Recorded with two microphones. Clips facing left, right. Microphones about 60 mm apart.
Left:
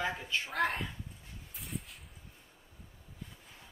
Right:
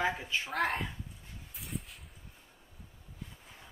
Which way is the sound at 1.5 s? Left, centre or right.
Centre.